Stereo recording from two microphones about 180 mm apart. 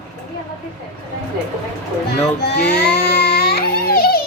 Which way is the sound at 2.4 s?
70° left (ahead or behind).